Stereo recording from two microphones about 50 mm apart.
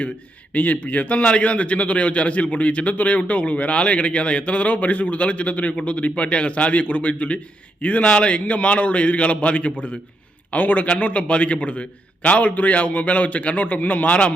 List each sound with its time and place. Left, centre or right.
0.5 s a man's voice: left